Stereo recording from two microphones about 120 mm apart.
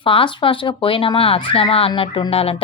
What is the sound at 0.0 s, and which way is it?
A woman's voice, 45° left (ahead or behind).